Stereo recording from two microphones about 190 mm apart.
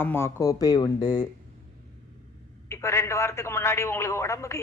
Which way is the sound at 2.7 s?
15° left (ahead or behind).